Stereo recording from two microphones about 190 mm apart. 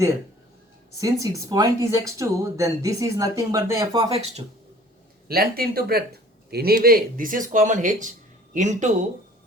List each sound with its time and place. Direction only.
0.9 s speech: 15° right (ahead or behind)
4.1 s speech: 35° right (ahead or behind)
5.3 s speech: 50° right (ahead or behind)